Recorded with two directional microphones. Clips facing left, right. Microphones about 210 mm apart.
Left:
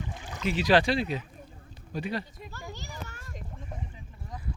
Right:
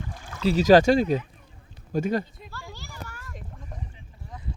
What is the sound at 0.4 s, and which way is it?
Speech, 40° right (ahead or behind).